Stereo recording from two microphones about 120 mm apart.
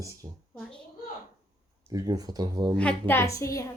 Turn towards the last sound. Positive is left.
turn(degrees=25)  # may be behind; listen again after turning